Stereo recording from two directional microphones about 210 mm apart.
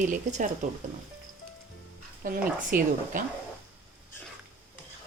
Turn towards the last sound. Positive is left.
turn(degrees=-40)  # may be behind; listen again after turning